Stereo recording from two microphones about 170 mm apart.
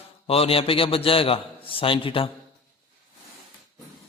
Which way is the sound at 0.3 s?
35° left (ahead or behind).